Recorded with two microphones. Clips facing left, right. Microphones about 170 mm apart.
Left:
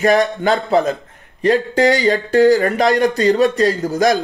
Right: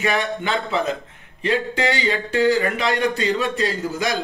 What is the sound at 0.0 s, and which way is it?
A man's voice, 40° left (ahead or behind).